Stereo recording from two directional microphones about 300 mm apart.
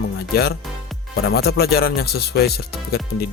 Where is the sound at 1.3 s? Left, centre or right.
Left.